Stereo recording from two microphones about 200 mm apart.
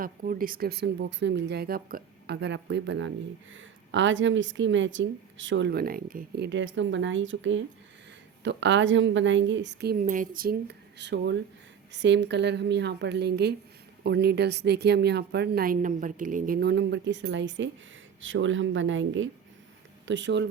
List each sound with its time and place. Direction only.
0.0 s a woman's voice: 45° right (ahead or behind)
10.0 s a woman's voice: 40° right (ahead or behind); by 19.3 s 75° right (ahead or behind)
20.1 s a woman's voice: 65° right (ahead or behind)